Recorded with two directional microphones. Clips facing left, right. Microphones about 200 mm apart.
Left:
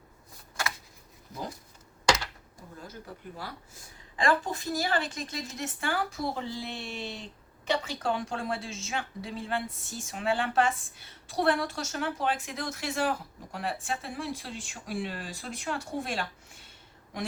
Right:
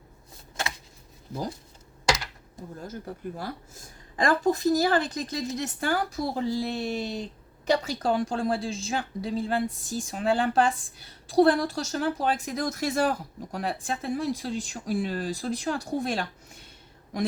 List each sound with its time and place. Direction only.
2.8 s a woman's voice: 45° right (ahead or behind)